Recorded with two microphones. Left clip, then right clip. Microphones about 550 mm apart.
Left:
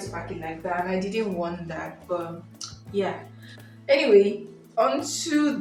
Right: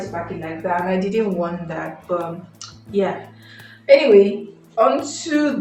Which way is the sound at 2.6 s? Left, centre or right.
Left.